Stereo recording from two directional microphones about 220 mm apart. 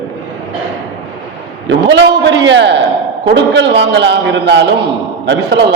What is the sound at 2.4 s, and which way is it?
A man's voice, 55° right (ahead or behind).